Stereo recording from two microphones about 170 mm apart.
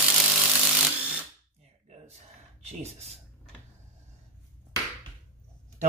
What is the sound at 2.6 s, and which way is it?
Speech, 40° right (ahead or behind).